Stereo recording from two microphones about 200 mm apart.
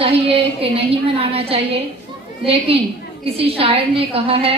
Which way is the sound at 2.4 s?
30° right (ahead or behind).